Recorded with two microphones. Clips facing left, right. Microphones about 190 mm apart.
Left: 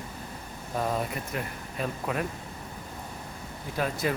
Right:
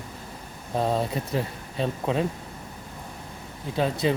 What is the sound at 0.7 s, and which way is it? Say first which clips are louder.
Speech: right 5 dB; 25° right (ahead or behind).